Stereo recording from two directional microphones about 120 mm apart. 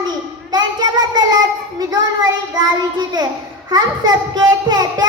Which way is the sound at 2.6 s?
35° right (ahead or behind).